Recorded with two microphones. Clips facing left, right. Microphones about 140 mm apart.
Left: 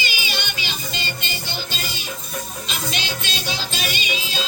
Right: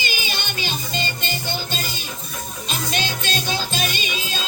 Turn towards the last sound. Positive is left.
turn(degrees=-45)  # may be behind; listen again after turning